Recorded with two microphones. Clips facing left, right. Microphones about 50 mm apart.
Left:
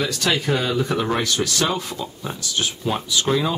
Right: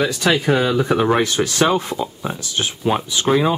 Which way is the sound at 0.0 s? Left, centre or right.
Centre.